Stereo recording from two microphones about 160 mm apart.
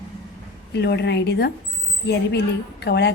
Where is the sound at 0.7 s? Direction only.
90° left.